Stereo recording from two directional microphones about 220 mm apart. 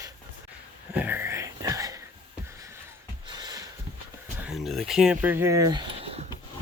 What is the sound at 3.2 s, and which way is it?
Snort, 20° right (ahead or behind).